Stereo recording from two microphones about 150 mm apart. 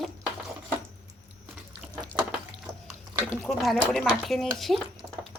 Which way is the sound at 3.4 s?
Centre (ahead or behind).